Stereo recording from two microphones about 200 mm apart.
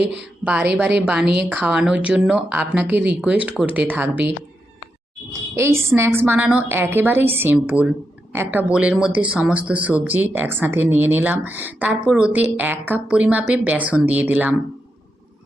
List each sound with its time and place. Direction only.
0.0 s speech: 60° right (ahead or behind)
0.4 s speech: 5° right (ahead or behind)
5.5 s speech: 15° right (ahead or behind)